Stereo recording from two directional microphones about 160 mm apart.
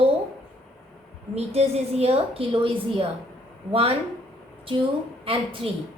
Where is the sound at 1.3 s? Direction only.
40° right (ahead or behind).